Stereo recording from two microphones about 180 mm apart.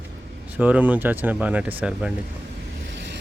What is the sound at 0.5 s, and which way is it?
Speech, 10° right (ahead or behind).